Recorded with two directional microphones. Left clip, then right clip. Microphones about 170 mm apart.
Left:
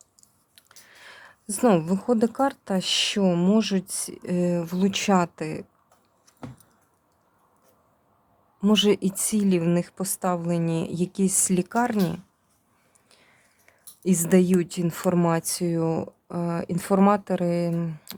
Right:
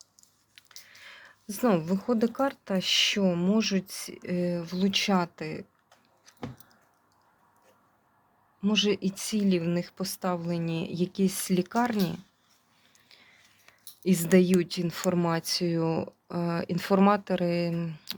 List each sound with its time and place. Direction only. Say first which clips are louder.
0.2 s speech: right 1 dB; 15° left (ahead or behind)
8.6 s a woman's voice: left 5 dB; 35° left (ahead or behind); by 12.2 s 15° left (ahead or behind)
13.7 s a woman's voice: left 2 dB; 15° left (ahead or behind)